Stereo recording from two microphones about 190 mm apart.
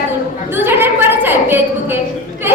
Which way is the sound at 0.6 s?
10° right (ahead or behind).